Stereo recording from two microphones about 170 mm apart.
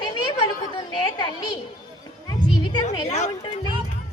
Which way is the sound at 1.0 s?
25° left (ahead or behind).